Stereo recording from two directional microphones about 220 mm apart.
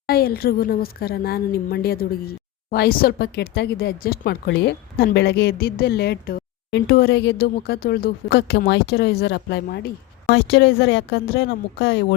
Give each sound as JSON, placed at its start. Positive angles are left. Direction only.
{"t": 0.1, "sound": "a woman's voice", "side_deg": 45}